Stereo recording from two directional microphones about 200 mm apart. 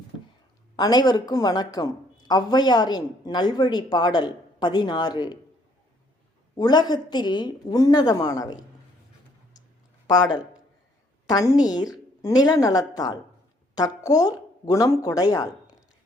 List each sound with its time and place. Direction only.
0.8 s a woman's voice: 20° left (ahead or behind)
6.6 s a woman's voice: 20° left (ahead or behind)
10.1 s a woman's voice: 20° left (ahead or behind)